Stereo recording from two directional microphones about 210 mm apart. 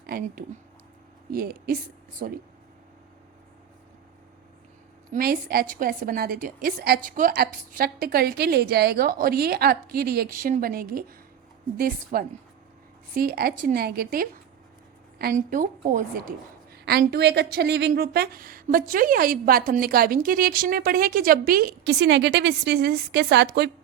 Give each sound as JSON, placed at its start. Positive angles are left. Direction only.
{"t": 0.0, "sound": "a woman's voice", "side_deg": -45}
{"t": 5.1, "sound": "a woman's voice", "side_deg": -45}